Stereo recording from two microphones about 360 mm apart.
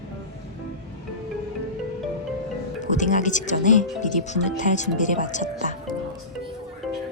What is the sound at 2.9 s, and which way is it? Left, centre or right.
Speech, left.